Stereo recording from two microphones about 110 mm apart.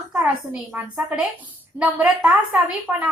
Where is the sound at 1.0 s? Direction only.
5° right (ahead or behind).